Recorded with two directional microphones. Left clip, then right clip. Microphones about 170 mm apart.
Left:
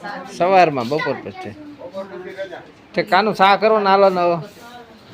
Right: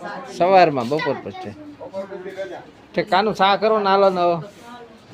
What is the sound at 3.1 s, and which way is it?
Speech, 20° left (ahead or behind).